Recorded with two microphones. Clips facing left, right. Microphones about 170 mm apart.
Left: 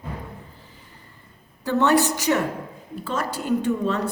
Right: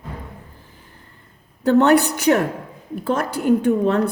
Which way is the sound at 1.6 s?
60° right (ahead or behind).